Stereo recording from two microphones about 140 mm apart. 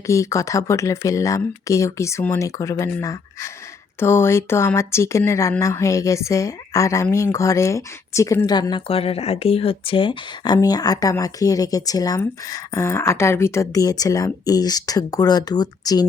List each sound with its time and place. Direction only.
0.1 s speech: 20° left (ahead or behind)